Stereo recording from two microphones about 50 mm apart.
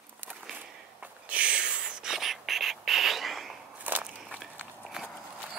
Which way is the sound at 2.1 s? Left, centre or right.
Centre.